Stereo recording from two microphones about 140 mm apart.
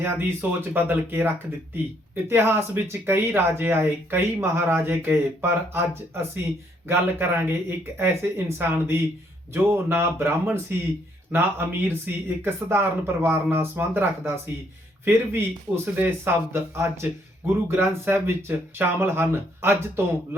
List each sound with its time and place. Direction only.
0.0 s speech: 15° right (ahead or behind)